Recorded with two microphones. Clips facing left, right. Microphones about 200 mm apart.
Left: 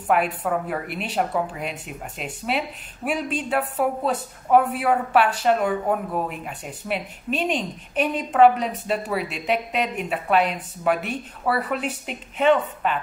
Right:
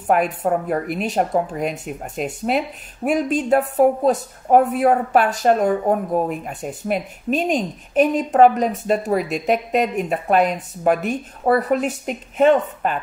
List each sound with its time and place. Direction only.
0.0 s speech: 45° right (ahead or behind)